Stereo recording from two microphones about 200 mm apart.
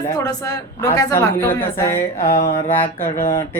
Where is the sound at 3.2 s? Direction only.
40° left (ahead or behind).